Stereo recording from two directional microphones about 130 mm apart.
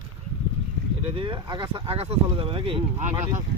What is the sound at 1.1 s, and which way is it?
Speech, 45° right (ahead or behind).